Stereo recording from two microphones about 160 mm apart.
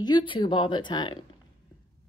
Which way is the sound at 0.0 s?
30° left (ahead or behind).